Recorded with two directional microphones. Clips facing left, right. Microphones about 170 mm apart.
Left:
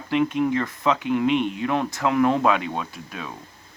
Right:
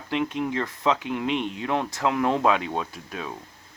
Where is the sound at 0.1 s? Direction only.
25° right (ahead or behind).